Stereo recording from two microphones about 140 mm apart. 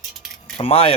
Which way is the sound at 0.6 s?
40° left (ahead or behind).